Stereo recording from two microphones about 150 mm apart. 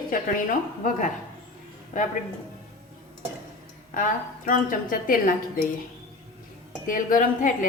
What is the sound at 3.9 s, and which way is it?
A woman's voice, 65° left (ahead or behind).